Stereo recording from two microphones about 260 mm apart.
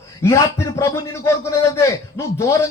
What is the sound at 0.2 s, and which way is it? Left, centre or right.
A man's voice, centre.